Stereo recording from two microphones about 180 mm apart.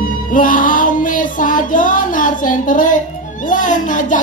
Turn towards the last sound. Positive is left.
turn(degrees=45)  # may be behind; listen again after turning